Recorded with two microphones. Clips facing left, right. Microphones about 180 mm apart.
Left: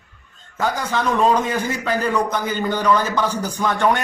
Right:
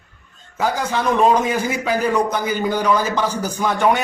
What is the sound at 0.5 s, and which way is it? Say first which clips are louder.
A man's voice: right 1 dB; 10° right (ahead or behind).